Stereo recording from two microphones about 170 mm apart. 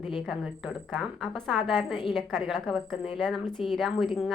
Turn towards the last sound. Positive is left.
turn(degrees=0)  # may be behind; listen again after turning